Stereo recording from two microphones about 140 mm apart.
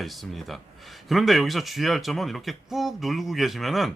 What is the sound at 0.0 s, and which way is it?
Speech, centre (ahead or behind).